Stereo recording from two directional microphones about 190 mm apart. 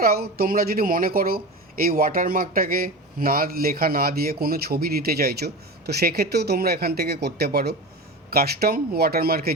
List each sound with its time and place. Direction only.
0.0 s speech: 55° right (ahead or behind)